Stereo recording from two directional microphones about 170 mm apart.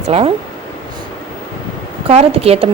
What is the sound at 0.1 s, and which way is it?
Speech, 35° right (ahead or behind).